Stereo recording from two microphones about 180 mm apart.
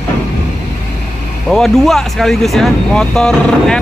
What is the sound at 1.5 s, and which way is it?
Speech, centre (ahead or behind).